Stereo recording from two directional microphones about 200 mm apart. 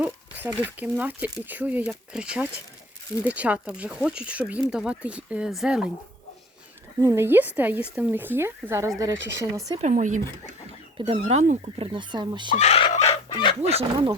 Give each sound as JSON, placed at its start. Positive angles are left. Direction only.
{"t": 0.0, "sound": "a sound", "side_deg": -10}
{"t": 0.8, "sound": "speech", "side_deg": -10}
{"t": 7.0, "sound": "speech", "side_deg": -10}
{"t": 9.8, "sound": "speech", "side_deg": -40}
{"t": 12.5, "sound": "a sound", "side_deg": 30}
{"t": 13.3, "sound": "speech", "side_deg": 25}
{"t": 13.6, "sound": "speech", "side_deg": -30}